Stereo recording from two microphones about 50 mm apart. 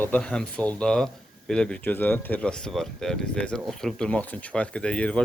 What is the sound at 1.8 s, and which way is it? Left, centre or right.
Speech, left.